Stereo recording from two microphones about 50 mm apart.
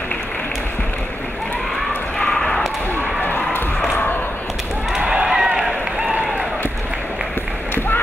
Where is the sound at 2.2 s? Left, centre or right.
Centre.